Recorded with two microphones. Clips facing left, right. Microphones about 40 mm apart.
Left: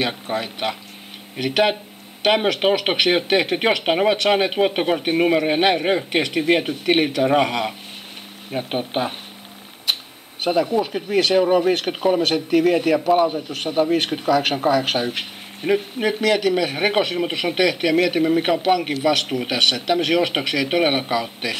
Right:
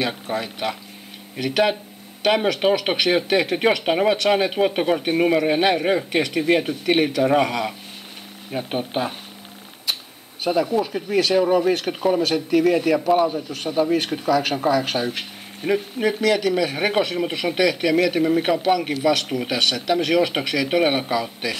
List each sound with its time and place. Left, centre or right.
0.0 s speech: left
4.3 s speech: left
10.5 s speech: centre
10.8 s speech: centre
13.6 s speech: left